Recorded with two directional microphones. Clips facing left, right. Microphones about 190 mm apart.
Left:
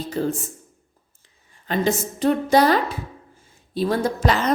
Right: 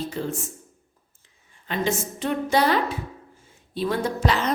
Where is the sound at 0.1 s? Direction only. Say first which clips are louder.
Left 5 dB; 40° left (ahead or behind).